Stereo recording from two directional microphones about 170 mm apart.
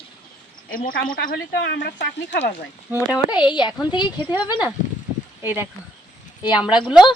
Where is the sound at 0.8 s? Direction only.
55° left (ahead or behind); by 2.5 s 90° left.